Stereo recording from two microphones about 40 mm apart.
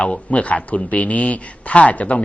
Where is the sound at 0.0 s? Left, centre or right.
Left.